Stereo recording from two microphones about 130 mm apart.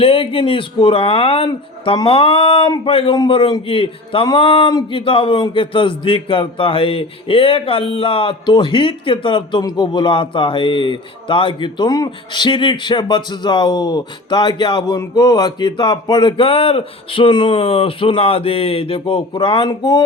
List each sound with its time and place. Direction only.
0.0 s a man's voice: 45° left (ahead or behind)